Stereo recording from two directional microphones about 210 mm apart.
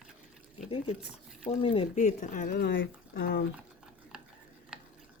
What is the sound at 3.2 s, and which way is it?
Speech, 45° left (ahead or behind).